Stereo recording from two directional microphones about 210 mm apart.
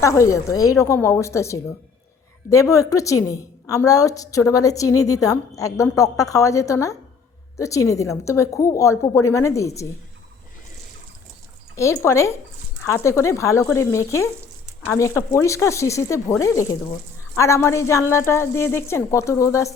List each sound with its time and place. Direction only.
0.0 s a woman's voice: 15° left (ahead or behind)
11.8 s a woman's voice: 15° left (ahead or behind)